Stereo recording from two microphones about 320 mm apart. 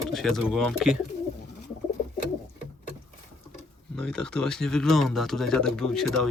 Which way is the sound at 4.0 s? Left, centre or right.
Centre.